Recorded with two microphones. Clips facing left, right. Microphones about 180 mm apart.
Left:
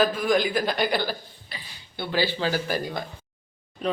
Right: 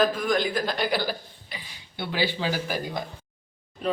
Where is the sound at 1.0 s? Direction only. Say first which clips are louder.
Even; 15° right (ahead or behind).